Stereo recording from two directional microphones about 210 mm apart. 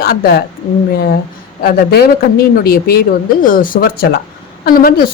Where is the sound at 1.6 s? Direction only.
45° left (ahead or behind).